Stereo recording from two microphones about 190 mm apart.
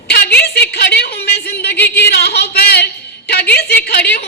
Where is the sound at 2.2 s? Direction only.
60° left (ahead or behind).